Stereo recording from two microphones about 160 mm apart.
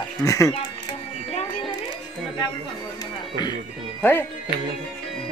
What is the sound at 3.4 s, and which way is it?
Music, 25° left (ahead or behind).